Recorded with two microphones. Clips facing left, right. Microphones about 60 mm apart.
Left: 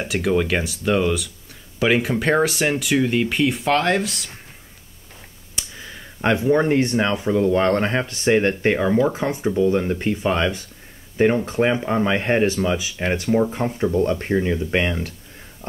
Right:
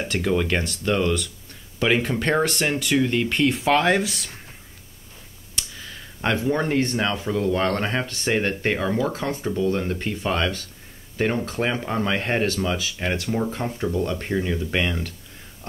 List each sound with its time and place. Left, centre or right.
0.0 s speech: centre
5.6 s a sound: centre
6.5 s speech: centre
13.9 s speech: left
14.2 s speech: centre